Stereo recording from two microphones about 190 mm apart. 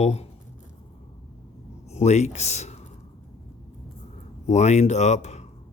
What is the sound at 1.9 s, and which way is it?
Speech, 35° left (ahead or behind).